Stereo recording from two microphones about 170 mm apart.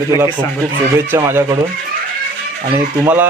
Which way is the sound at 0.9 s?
15° right (ahead or behind).